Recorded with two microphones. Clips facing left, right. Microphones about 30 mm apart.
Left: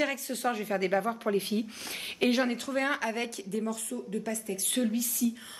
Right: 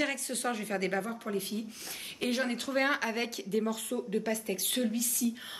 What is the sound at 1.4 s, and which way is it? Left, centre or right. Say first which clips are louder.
Speech: left 5 dB; left.